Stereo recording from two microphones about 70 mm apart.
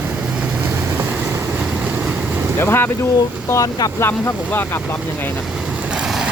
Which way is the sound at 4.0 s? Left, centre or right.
Left.